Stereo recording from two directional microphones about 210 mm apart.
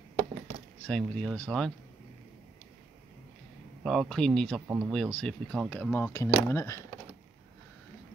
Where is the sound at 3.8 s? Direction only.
Centre (ahead or behind).